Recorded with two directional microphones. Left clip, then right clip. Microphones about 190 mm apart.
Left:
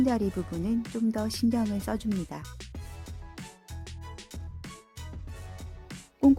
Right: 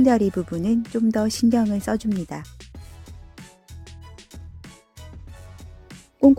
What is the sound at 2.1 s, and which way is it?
Speech, centre (ahead or behind).